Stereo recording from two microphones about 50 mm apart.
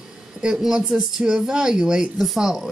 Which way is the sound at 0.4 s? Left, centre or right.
Centre.